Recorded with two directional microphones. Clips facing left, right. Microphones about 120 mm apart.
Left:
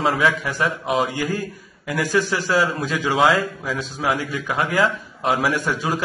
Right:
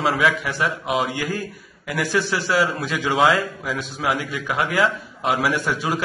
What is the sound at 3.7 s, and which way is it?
Speech, 40° left (ahead or behind).